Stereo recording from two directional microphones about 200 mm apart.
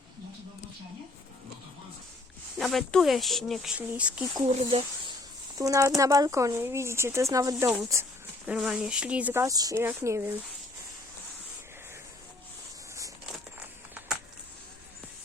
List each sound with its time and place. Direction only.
2.6 s speech: centre (ahead or behind)
4.4 s speech: 25° right (ahead or behind)
8.4 s speech: 5° right (ahead or behind)